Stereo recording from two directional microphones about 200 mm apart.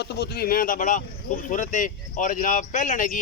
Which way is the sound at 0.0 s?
55° left (ahead or behind).